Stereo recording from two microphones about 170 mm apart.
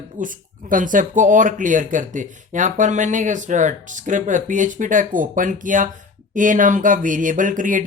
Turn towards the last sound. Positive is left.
turn(degrees=-50)  # may be behind; listen again after turning